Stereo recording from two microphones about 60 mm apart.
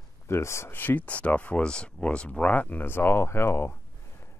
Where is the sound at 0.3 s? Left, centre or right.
Left.